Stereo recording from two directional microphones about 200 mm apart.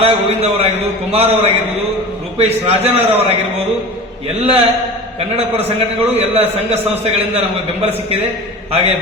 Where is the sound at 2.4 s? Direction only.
30° right (ahead or behind).